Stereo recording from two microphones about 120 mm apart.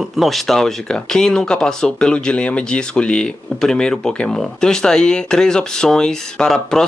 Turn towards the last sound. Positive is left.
turn(degrees=5)  # may be behind; listen again after turning